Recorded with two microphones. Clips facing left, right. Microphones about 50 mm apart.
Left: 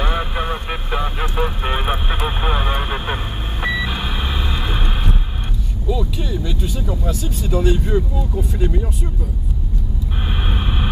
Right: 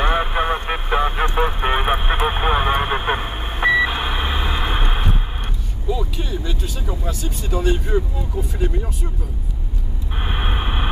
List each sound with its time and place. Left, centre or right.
0.0 s vehicle: centre
6.5 s speech: centre
6.8 s speech: centre
10.2 s a sound: centre